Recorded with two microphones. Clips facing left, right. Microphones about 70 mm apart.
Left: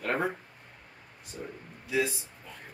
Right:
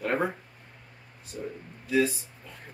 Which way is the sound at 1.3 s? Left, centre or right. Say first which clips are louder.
Right 4 dB; centre.